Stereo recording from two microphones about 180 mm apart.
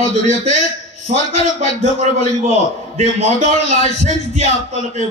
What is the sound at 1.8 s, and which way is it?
Speech, 40° right (ahead or behind).